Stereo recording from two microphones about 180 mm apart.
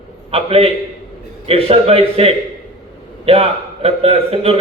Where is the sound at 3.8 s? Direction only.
35° right (ahead or behind).